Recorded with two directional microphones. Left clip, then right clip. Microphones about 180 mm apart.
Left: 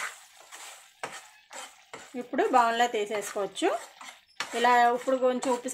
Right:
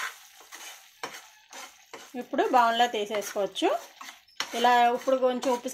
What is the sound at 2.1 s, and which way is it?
Speech, 5° right (ahead or behind).